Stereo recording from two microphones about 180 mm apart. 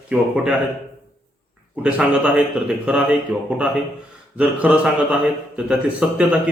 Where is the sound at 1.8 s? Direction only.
5° right (ahead or behind).